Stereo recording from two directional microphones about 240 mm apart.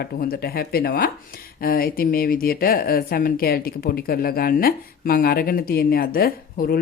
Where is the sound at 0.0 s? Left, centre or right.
Left.